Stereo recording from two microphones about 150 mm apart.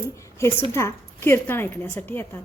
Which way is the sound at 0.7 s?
20° left (ahead or behind).